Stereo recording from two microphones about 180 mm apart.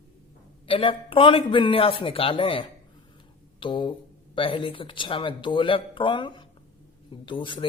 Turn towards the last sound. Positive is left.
turn(degrees=30)  # may be behind; listen again after turning